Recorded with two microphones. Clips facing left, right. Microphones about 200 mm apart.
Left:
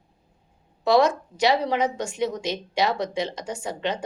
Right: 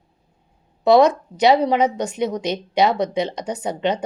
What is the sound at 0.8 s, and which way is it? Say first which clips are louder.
A woman's voice: right 5 dB; 20° right (ahead or behind).